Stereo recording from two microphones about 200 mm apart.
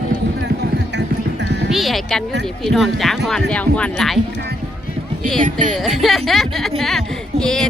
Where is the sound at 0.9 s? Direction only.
60° right (ahead or behind).